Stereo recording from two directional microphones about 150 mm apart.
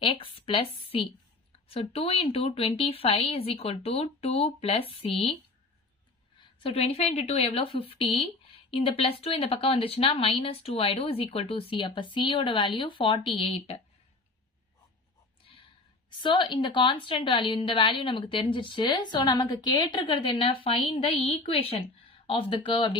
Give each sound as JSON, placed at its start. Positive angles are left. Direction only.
{"t": 0.0, "sound": "speech", "side_deg": 35}
{"t": 6.4, "sound": "speech", "side_deg": 40}
{"t": 16.0, "sound": "speech", "side_deg": 30}